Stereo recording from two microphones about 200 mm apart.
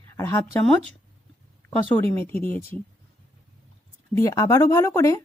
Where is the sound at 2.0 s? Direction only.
10° left (ahead or behind).